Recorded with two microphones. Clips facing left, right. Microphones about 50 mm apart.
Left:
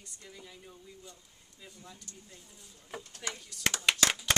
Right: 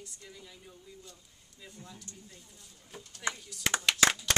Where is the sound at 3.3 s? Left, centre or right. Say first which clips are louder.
Left 1 dB; centre.